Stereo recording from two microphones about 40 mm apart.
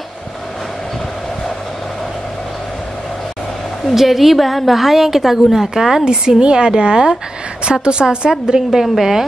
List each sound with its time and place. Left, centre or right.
3.9 s a woman's voice: centre
6.4 s a woman's voice: right
8.8 s a woman's voice: centre